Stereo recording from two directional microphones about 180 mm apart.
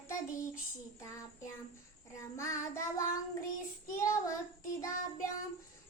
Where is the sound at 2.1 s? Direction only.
15° left (ahead or behind).